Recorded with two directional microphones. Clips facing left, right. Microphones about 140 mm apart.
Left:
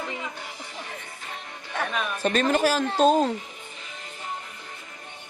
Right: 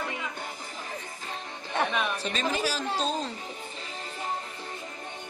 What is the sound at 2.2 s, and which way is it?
A woman's voice, 55° left (ahead or behind).